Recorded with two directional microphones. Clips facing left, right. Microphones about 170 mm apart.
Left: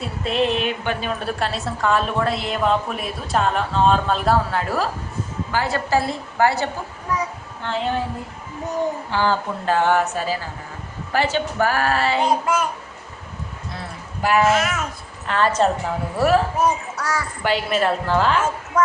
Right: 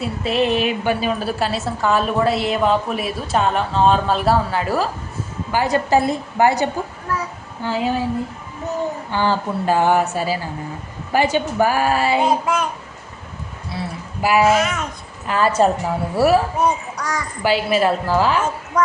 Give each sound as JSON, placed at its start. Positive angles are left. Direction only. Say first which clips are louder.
{"t": 0.0, "sound": "a woman's voice", "louder": "right 2 dB", "side_deg": -5}
{"t": 5.5, "sound": "a woman's voice", "louder": "right 5 dB", "side_deg": -15}
{"t": 7.6, "sound": "a woman's voice", "louder": "right 3 dB", "side_deg": -5}
{"t": 9.2, "sound": "a woman's voice", "louder": "right 3 dB", "side_deg": -10}
{"t": 12.3, "sound": "a woman's voice", "louder": "right 1 dB", "side_deg": 0}
{"t": 13.7, "sound": "a woman's voice", "louder": "right 8 dB", "side_deg": -5}
{"t": 16.6, "sound": "a child's voice", "louder": "right 1 dB", "side_deg": 10}
{"t": 17.4, "sound": "a woman's voice", "louder": "right 4 dB", "side_deg": -5}